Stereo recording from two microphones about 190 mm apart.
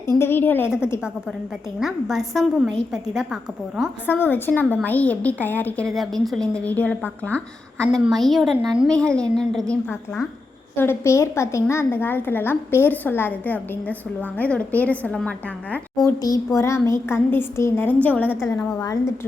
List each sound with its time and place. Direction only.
0.1 s a sound: 10° left (ahead or behind)
1.8 s a woman's voice: centre (ahead or behind)
4.0 s a woman's voice: 10° left (ahead or behind)
10.8 s a woman's voice: 15° left (ahead or behind)
16.0 s a woman's voice: 20° left (ahead or behind)
18.3 s a woman's voice: centre (ahead or behind)
18.5 s a woman's voice: 15° left (ahead or behind)